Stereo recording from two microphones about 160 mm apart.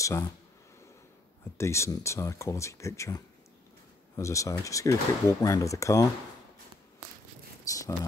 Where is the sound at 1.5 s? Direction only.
15° left (ahead or behind).